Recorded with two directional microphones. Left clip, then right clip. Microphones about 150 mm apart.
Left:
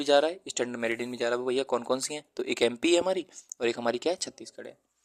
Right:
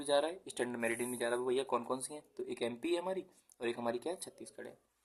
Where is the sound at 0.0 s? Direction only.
50° left (ahead or behind).